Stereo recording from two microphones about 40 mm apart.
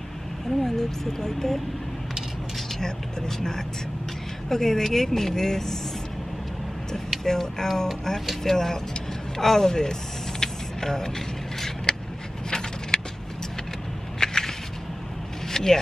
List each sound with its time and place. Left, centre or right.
0.7 s a woman's voice: centre
2.8 s a woman's voice: centre
7.2 s a woman's voice: centre
10.4 s vehicle: centre
12.4 s a sound: centre
14.2 s a sound: centre